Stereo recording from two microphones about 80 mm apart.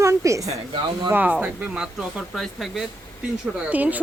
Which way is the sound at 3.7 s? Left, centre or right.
Centre.